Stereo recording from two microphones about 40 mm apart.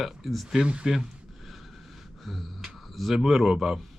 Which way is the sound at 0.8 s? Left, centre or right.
Centre.